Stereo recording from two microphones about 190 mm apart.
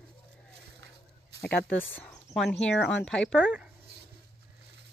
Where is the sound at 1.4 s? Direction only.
10° left (ahead or behind).